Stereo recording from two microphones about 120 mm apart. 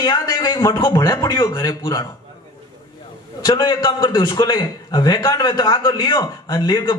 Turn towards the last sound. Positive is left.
turn(degrees=35)  # may be behind; listen again after turning